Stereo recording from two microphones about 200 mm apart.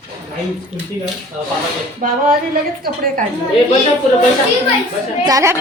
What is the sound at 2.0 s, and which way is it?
Speech, 40° right (ahead or behind).